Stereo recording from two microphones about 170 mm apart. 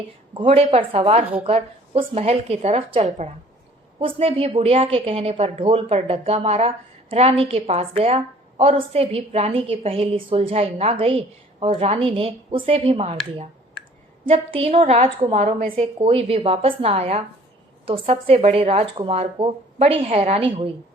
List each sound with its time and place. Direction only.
0.3 s a woman's voice: 35° right (ahead or behind)
14.3 s a woman's voice: 35° right (ahead or behind)